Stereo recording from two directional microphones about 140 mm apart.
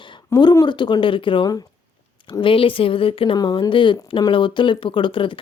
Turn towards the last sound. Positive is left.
turn(degrees=35)  # may be behind; listen again after turning